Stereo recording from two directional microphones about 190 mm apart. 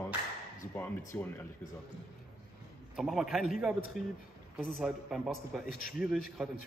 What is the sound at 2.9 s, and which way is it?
A man's voice, centre (ahead or behind).